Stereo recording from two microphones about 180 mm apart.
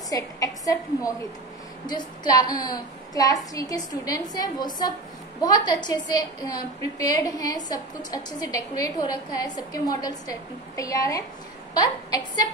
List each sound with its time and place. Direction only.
0.1 s a woman's voice: 20° left (ahead or behind)